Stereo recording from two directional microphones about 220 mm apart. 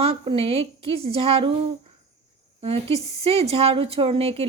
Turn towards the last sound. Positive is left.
turn(degrees=-25)  # may be behind; listen again after turning